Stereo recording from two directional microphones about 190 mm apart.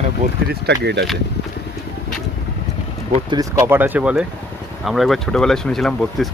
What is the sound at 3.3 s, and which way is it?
Speech, 15° right (ahead or behind).